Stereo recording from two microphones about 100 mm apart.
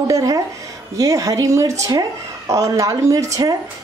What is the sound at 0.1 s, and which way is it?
A woman's voice, 35° right (ahead or behind).